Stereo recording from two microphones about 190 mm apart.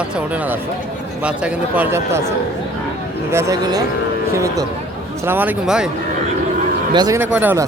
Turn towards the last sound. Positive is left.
turn(degrees=-10)  # may be behind; listen again after turning